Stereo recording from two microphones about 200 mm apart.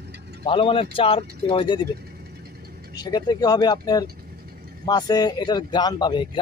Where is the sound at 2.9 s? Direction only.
20° left (ahead or behind).